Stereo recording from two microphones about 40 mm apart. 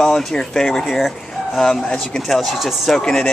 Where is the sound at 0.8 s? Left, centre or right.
Centre.